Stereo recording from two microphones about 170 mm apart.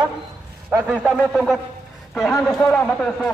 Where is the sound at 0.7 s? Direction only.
10° right (ahead or behind).